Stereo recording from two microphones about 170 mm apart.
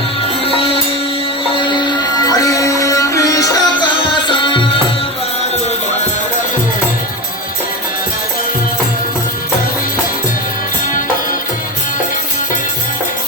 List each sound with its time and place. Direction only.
0.4 s music: 35° left (ahead or behind)